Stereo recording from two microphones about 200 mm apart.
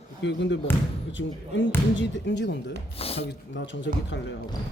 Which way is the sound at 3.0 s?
30° left (ahead or behind).